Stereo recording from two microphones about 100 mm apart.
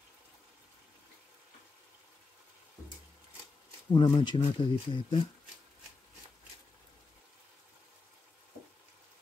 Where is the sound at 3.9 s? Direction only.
50° left (ahead or behind).